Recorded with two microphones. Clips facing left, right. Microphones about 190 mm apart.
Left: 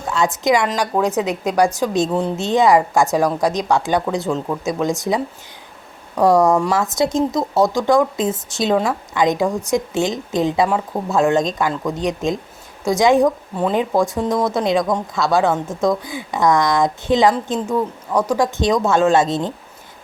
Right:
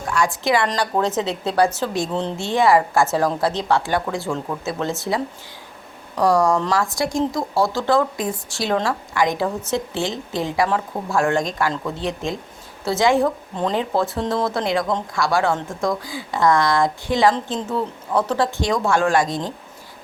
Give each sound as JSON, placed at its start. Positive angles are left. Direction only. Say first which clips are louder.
{"t": 0.1, "sound": "a woman's voice", "louder": "left 3 dB", "side_deg": 20}
{"t": 6.5, "sound": "a woman's voice", "louder": "left 3 dB", "side_deg": 10}
{"t": 6.7, "sound": "a woman's voice", "louder": "left 3 dB", "side_deg": 20}